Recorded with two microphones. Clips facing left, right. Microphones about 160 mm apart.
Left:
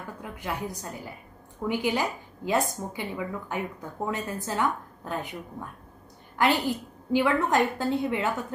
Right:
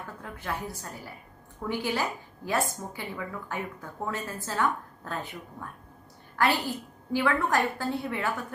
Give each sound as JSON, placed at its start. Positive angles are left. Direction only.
{"t": 0.2, "sound": "a woman's voice", "side_deg": 15}